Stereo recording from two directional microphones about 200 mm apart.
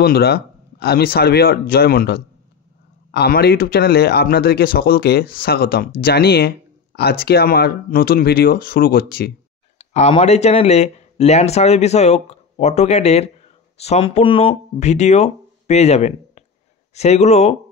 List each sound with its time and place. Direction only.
0.0 s speech: 50° left (ahead or behind)
9.8 s speech: 35° left (ahead or behind)